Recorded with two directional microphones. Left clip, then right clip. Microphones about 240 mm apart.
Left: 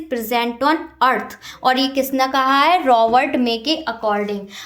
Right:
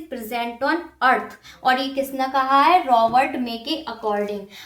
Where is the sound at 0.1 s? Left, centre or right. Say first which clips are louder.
Left 7 dB; left.